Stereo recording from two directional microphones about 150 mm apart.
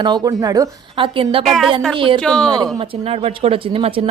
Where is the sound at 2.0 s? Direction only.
35° right (ahead or behind).